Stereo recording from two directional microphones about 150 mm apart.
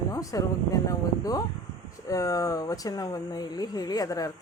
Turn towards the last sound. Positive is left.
turn(degrees=25)  # may be behind; listen again after turning